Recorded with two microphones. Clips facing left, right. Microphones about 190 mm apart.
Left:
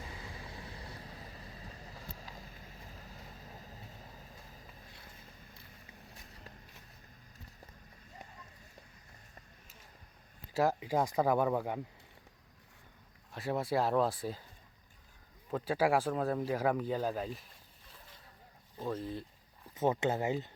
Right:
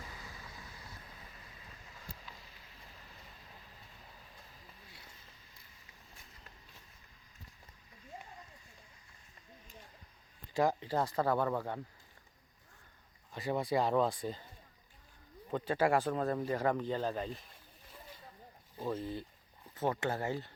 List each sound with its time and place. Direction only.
0.3 s vehicle: 25° left (ahead or behind)
3.5 s train: 40° left (ahead or behind)
10.5 s speech: 5° left (ahead or behind)
13.3 s speech: centre (ahead or behind)
15.5 s speech: 5° left (ahead or behind)
18.8 s speech: 5° right (ahead or behind)
19.7 s speech: 20° left (ahead or behind)